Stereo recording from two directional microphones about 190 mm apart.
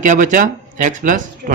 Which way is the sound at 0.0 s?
40° right (ahead or behind).